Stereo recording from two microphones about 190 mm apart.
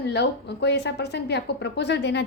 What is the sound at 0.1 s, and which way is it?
Speech, 65° left (ahead or behind).